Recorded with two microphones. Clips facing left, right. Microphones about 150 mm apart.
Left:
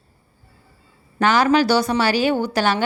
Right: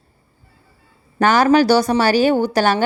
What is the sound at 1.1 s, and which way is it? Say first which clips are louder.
A woman's voice: right 3 dB; 45° right (ahead or behind).